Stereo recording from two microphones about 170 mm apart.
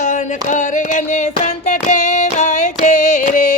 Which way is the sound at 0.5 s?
45° left (ahead or behind).